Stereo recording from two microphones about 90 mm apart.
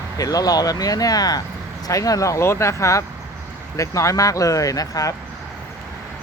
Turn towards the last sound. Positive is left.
turn(degrees=40)  # may be behind; listen again after turning